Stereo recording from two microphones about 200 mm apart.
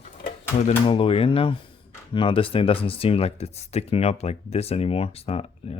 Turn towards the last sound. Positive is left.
turn(degrees=30)  # may be behind; listen again after turning